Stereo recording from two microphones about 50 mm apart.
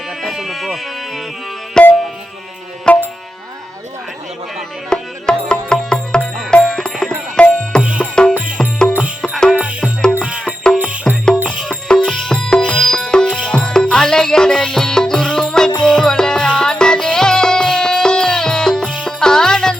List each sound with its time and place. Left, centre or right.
0.2 s music: centre
1.8 s music: centre
2.9 s tabla: centre
4.9 s music: centre
7.8 s music: centre
8.1 s music: centre
9.6 s music: right
11.7 s music: centre